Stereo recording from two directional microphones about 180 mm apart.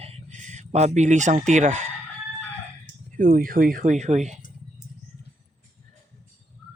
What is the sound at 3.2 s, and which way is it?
Speech, 50° right (ahead or behind).